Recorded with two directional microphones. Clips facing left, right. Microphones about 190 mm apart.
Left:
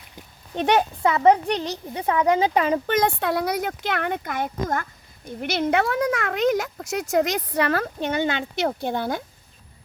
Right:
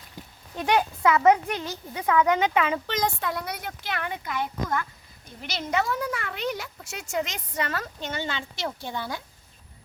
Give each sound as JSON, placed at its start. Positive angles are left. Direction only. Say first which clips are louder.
{"t": 0.5, "sound": "speech", "louder": "left 4 dB", "side_deg": 25}
{"t": 2.9, "sound": "speech", "louder": "left 6 dB", "side_deg": 60}
{"t": 3.7, "sound": "speech", "louder": "left 7 dB", "side_deg": 55}
{"t": 6.5, "sound": "speech", "louder": "left 10 dB", "side_deg": 45}